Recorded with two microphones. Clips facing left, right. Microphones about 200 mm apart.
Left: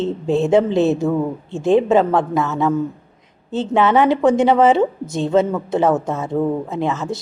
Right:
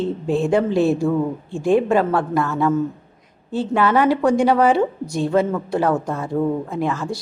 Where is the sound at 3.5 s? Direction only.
20° left (ahead or behind).